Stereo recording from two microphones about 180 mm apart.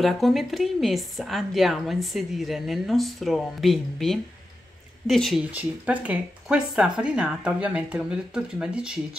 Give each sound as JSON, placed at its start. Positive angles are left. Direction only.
{"t": 0.0, "sound": "a woman's voice", "side_deg": 0}